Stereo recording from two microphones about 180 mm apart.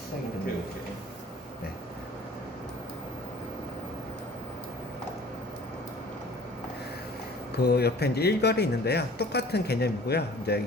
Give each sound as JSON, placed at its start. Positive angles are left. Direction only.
{"t": 7.6, "sound": "speech", "side_deg": 65}